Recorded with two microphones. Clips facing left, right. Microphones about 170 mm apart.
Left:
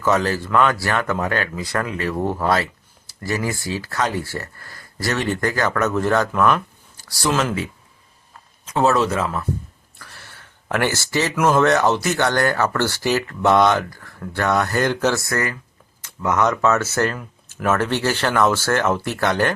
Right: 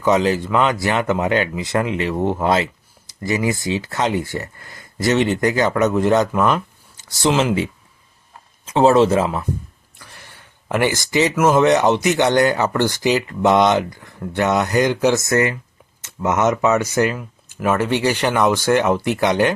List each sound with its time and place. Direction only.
0.0 s speech: 20° right (ahead or behind)
8.6 s speech: 30° right (ahead or behind)
10.0 s a sound: 15° right (ahead or behind)
11.5 s speech: 20° right (ahead or behind)